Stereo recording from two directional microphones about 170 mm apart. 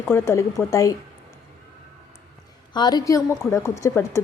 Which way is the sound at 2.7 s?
25° left (ahead or behind).